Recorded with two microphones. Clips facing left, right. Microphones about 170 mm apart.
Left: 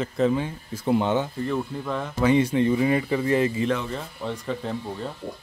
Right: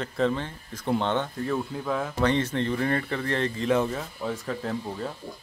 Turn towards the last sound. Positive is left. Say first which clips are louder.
# left 1 dB
turn(degrees=0)  # may be behind; listen again after turning